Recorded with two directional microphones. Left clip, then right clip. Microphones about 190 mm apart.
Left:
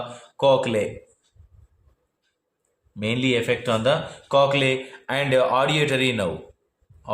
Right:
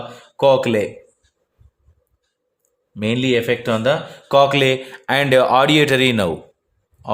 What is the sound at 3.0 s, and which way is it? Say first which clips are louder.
A man's voice: right 5 dB; 40° right (ahead or behind).